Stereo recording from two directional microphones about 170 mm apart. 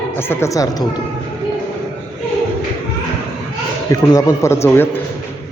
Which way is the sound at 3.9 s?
20° left (ahead or behind).